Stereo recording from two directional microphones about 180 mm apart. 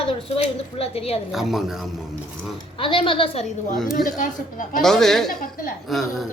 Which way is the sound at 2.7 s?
30° left (ahead or behind).